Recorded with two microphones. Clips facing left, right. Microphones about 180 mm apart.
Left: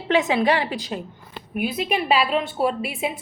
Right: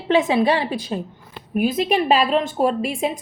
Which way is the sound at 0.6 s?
15° left (ahead or behind).